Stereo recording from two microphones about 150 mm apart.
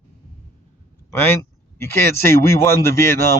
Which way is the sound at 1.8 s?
15° left (ahead or behind).